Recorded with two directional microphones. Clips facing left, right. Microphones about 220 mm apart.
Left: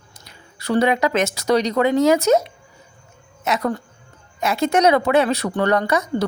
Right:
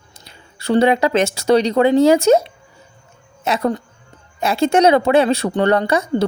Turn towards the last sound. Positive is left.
turn(degrees=-30)  # may be behind; listen again after turning